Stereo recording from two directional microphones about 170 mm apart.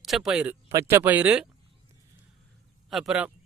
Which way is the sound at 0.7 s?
15° right (ahead or behind).